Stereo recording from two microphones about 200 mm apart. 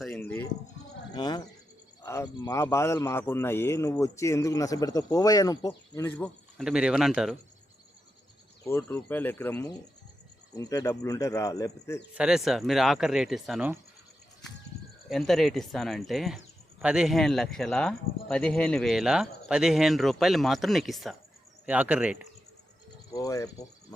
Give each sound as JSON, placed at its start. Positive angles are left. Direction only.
{"t": 0.0, "sound": "a sound", "side_deg": 5}
{"t": 1.1, "sound": "a man's voice", "side_deg": 20}
{"t": 8.6, "sound": "a man's voice", "side_deg": 10}
{"t": 12.1, "sound": "speech", "side_deg": -5}
{"t": 15.1, "sound": "speech", "side_deg": 0}
{"t": 23.1, "sound": "a man's voice", "side_deg": 15}